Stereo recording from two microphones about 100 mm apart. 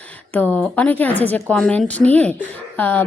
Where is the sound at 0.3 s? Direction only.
20° left (ahead or behind).